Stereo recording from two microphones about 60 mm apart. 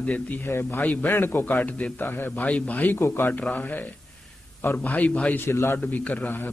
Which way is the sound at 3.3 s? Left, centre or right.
Left.